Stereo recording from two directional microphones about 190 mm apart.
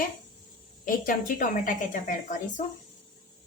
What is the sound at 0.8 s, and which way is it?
Speech, 45° left (ahead or behind).